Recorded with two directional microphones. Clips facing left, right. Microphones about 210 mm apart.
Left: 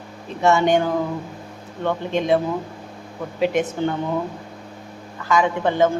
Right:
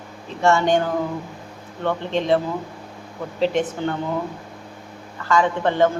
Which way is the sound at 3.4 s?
10° left (ahead or behind).